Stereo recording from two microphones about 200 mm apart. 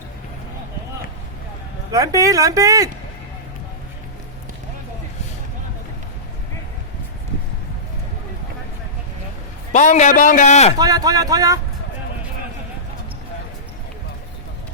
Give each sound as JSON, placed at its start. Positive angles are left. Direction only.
{"t": 1.9, "sound": "speech", "side_deg": -15}
{"t": 9.7, "sound": "a man's voice", "side_deg": 35}
{"t": 10.8, "sound": "speech", "side_deg": -20}